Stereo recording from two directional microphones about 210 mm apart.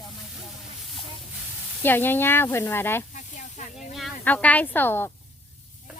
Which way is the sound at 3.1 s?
35° left (ahead or behind).